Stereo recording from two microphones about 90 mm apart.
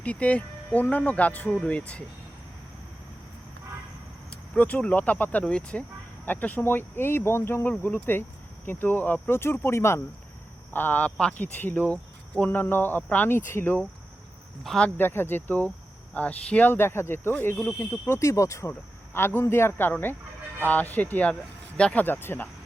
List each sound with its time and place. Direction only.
0.0 s speech: 15° left (ahead or behind)
4.3 s speech: 15° left (ahead or behind)
14.6 s speech: 5° left (ahead or behind)
14.8 s speech: 25° left (ahead or behind)
18.2 s speech: 35° left (ahead or behind)
18.7 s speech: 20° left (ahead or behind)
22.0 s speech: 25° left (ahead or behind)